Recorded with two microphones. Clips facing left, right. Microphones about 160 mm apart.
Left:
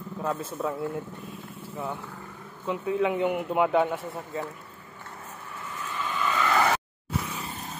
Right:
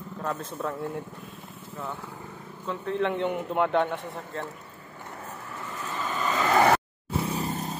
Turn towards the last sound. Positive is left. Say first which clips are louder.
# right 7 dB
turn(degrees=-40)  # may be behind; listen again after turning